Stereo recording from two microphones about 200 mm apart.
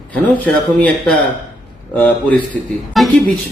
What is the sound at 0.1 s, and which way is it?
Speech, 5° left (ahead or behind).